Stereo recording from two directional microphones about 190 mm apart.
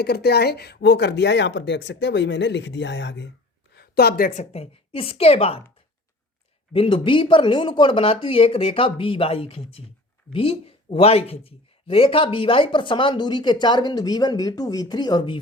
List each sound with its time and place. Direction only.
0.0 s speech: 55° left (ahead or behind)
3.8 s a woman's voice: 55° left (ahead or behind); by 5.6 s 30° left (ahead or behind)
6.7 s speech: 25° left (ahead or behind)